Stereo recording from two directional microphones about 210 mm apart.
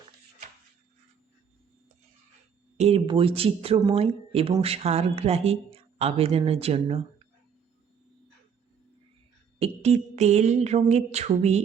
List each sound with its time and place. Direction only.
2.7 s speech: 30° right (ahead or behind)
9.6 s music: 30° right (ahead or behind)